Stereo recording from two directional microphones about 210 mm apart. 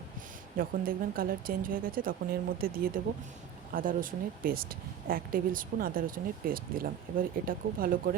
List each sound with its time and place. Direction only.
0.5 s speech: 45° right (ahead or behind)